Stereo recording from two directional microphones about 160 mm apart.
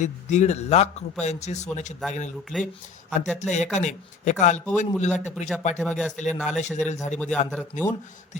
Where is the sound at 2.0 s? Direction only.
Centre (ahead or behind).